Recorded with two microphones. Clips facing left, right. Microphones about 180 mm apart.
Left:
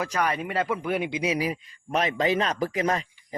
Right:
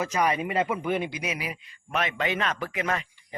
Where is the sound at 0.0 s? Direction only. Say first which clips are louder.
Right 1 dB; 5° right (ahead or behind).